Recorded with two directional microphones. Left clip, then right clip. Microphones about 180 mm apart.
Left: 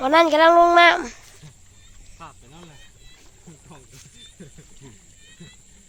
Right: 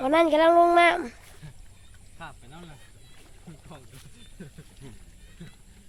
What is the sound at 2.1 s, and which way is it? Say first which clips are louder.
Cricket: left 1 dB; 20° right (ahead or behind).